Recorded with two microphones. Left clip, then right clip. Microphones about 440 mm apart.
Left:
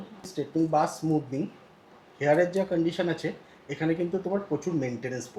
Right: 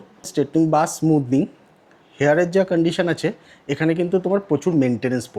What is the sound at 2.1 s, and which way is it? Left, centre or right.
Speech, right.